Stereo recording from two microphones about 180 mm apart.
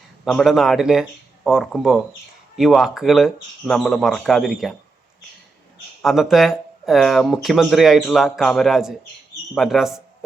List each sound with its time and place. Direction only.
0.3 s speech: centre (ahead or behind)
6.0 s speech: centre (ahead or behind)